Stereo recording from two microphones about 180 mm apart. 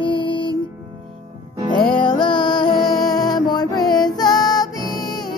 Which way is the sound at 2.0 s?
25° left (ahead or behind).